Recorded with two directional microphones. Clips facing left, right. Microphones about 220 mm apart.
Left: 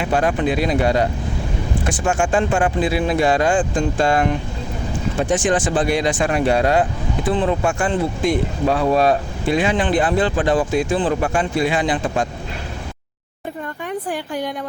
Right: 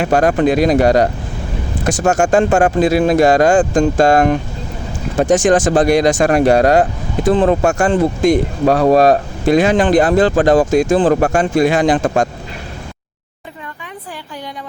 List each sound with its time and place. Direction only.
0.0 s speech: 45° right (ahead or behind)